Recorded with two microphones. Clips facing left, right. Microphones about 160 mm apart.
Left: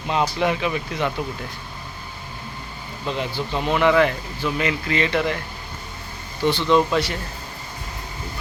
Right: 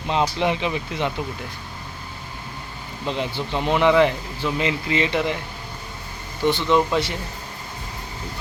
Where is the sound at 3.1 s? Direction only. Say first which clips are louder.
Even; 20° right (ahead or behind).